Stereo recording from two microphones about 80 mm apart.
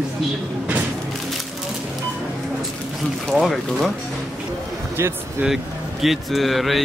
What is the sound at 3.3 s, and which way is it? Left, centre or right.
Speech, centre.